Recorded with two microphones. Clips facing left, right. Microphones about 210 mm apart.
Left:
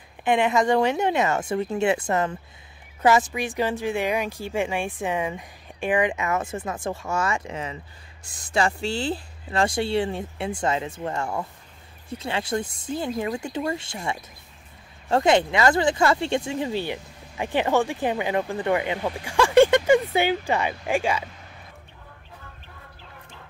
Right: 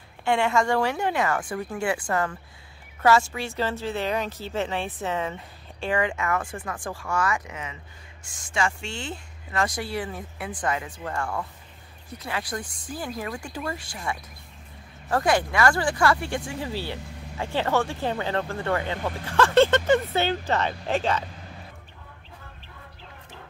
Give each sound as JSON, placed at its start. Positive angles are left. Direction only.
{"t": 0.2, "sound": "speech", "side_deg": 20}